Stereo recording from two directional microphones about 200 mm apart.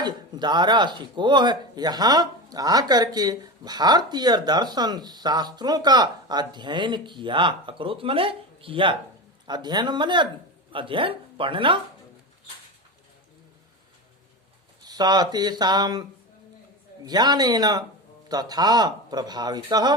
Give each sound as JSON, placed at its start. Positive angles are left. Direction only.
{"t": 0.0, "sound": "speech", "side_deg": -20}
{"t": 14.8, "sound": "speech", "side_deg": -20}
{"t": 17.1, "sound": "speech", "side_deg": -20}